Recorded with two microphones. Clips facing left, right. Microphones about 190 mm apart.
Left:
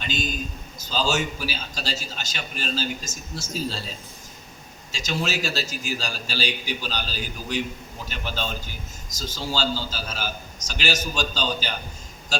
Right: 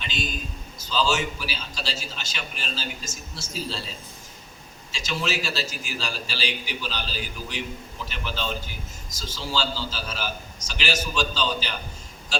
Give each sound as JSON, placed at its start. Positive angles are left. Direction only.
{"t": 0.0, "sound": "a man's voice", "side_deg": 40}
{"t": 4.9, "sound": "a man's voice", "side_deg": 40}
{"t": 8.0, "sound": "a man's voice", "side_deg": 45}